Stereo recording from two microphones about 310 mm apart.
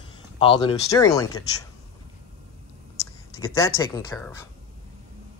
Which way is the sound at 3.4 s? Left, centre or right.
Centre.